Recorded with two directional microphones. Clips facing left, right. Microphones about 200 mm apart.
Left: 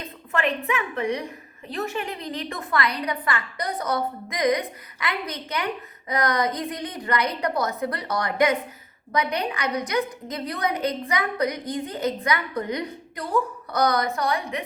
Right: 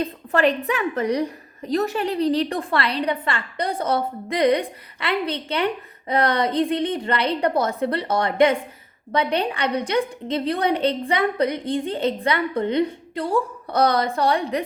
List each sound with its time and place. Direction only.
0.0 s a woman's voice: 35° right (ahead or behind)